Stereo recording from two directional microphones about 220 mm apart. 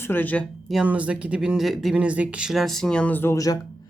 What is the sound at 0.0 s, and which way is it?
Speech, 10° left (ahead or behind).